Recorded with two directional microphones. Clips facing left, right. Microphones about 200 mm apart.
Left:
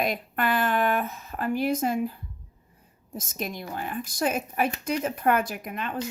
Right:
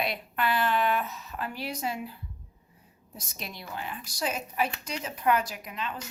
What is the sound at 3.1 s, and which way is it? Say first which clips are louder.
Speech: left 8 dB; 50° left (ahead or behind).